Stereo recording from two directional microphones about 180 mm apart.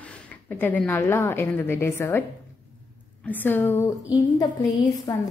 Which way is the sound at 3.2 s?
10° left (ahead or behind).